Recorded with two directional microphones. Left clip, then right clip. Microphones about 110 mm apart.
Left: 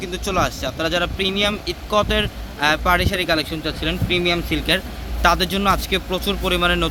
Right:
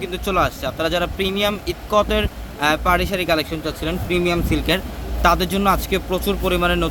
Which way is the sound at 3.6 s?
35° right (ahead or behind).